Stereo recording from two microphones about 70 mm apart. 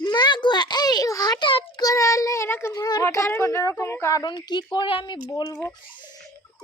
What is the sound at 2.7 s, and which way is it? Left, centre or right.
Speech, left.